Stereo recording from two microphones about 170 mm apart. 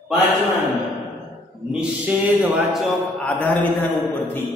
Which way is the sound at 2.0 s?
10° right (ahead or behind).